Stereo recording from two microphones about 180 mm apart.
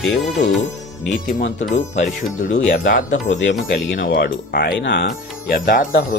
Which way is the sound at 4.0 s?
80° left.